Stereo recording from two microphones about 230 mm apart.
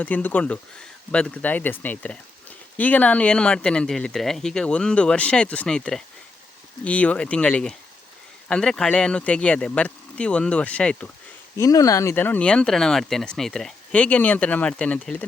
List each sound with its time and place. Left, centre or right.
0.0 s speech: centre